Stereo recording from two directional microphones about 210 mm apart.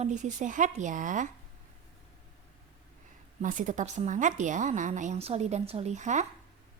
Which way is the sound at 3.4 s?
35° right (ahead or behind).